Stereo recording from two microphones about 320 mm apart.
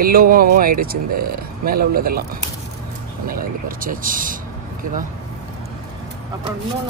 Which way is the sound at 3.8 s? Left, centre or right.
Right.